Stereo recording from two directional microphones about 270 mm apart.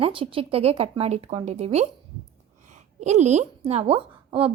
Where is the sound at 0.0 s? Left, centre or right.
Centre.